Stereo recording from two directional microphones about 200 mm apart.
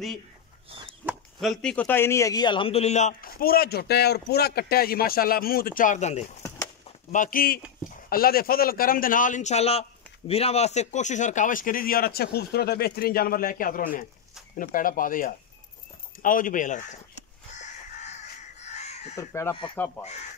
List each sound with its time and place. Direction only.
1.0 s a man's voice: centre (ahead or behind); by 16.8 s 40° left (ahead or behind)
17.5 s crow: 35° left (ahead or behind)
18.7 s chicken: 35° left (ahead or behind)
19.1 s speech: 15° left (ahead or behind)
20.0 s speech: 35° left (ahead or behind)